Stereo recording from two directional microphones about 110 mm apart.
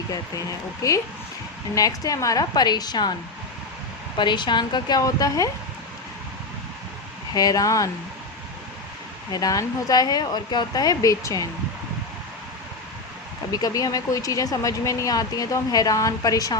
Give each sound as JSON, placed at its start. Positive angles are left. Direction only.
{"t": 0.1, "sound": "speech", "side_deg": 30}
{"t": 4.2, "sound": "speech", "side_deg": 45}
{"t": 7.3, "sound": "speech", "side_deg": 35}
{"t": 9.3, "sound": "speech", "side_deg": 35}
{"t": 13.5, "sound": "speech", "side_deg": 35}